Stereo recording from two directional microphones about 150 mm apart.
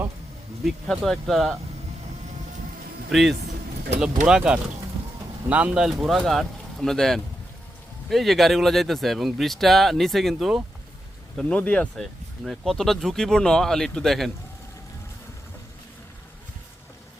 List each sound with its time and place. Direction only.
0.6 s speech: centre (ahead or behind)
3.1 s speech: centre (ahead or behind)